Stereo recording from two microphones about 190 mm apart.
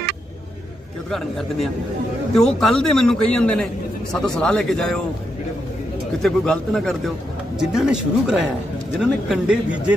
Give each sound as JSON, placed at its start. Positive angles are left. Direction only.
{"t": 2.3, "sound": "a man's voice", "side_deg": 0}
{"t": 6.2, "sound": "a man's voice", "side_deg": 5}